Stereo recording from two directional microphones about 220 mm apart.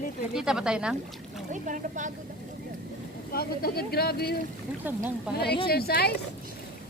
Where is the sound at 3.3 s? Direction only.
45° left (ahead or behind).